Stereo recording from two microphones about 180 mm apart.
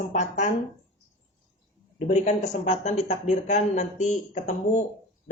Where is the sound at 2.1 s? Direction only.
40° left (ahead or behind).